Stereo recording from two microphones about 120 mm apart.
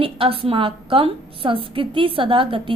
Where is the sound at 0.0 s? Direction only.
50° right (ahead or behind).